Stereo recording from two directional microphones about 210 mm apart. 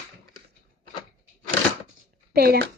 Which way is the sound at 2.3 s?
50° right (ahead or behind).